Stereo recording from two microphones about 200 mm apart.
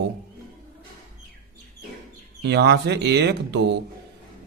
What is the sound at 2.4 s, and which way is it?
Speech, 55° right (ahead or behind).